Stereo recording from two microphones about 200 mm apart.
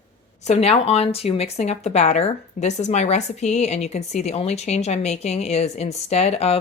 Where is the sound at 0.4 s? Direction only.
30° left (ahead or behind).